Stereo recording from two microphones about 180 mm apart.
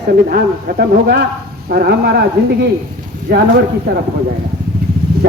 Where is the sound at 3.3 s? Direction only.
65° right (ahead or behind).